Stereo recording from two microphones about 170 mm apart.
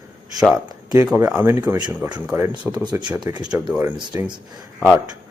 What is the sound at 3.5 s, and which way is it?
Speech, 10° right (ahead or behind).